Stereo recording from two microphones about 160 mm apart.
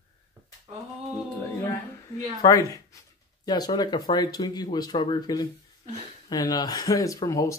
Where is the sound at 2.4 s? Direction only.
20° left (ahead or behind).